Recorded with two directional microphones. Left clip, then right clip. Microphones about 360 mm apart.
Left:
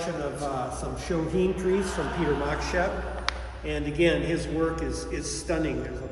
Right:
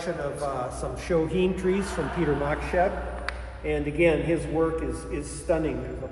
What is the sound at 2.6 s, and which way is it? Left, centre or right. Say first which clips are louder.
A man's voice: right 2 dB; centre.